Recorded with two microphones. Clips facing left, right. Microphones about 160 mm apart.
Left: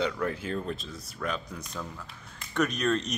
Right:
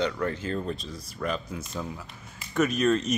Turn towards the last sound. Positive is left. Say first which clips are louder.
# right 4 dB
turn(degrees=-5)  # may be behind; listen again after turning